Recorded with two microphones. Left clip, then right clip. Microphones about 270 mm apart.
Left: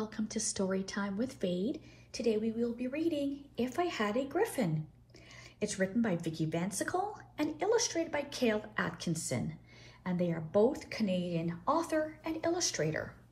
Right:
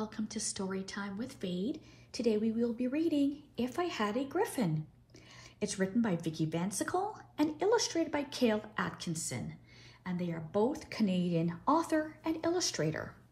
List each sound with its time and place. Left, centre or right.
0.0 s speech: centre
2.1 s speech: right
8.7 s speech: centre